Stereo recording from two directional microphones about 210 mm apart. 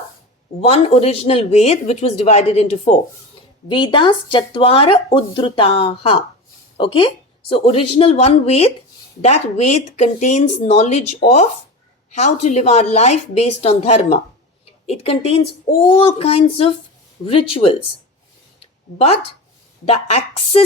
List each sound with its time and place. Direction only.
0.6 s speech: 30° left (ahead or behind)
18.6 s a sound: 30° left (ahead or behind)
19.8 s speech: 30° left (ahead or behind)